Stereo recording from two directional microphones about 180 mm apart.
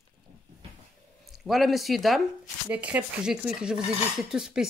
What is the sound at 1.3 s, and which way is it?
Speech, centre (ahead or behind).